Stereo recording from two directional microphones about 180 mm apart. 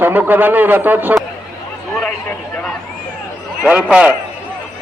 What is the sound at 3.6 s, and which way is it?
Speech, 5° right (ahead or behind).